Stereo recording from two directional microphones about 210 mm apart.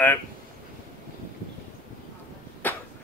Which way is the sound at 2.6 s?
10° left (ahead or behind).